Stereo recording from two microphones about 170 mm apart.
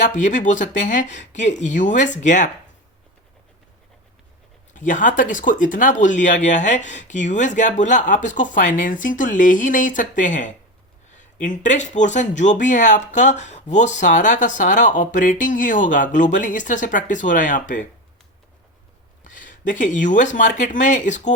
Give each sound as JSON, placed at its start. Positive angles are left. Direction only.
{"t": 0.0, "sound": "speech", "side_deg": 45}
{"t": 4.7, "sound": "speech", "side_deg": 50}
{"t": 19.2, "sound": "speech", "side_deg": 50}